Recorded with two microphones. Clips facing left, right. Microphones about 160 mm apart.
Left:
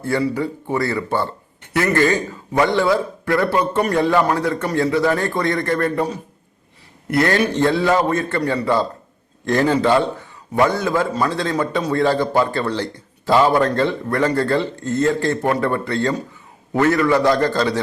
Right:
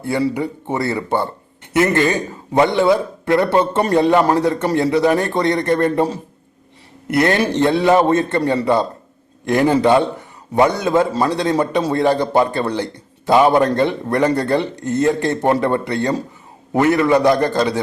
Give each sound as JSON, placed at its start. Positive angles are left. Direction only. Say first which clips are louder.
{"t": 0.0, "sound": "a man's voice", "louder": "right 1 dB", "side_deg": -15}